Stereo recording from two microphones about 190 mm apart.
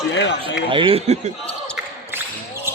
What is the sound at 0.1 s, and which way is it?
Speech, 65° left (ahead or behind).